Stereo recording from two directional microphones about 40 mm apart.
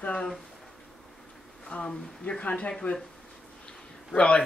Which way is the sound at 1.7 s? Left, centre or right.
Left.